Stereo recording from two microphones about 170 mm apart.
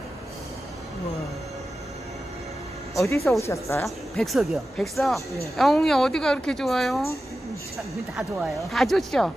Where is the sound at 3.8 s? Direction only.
Centre (ahead or behind).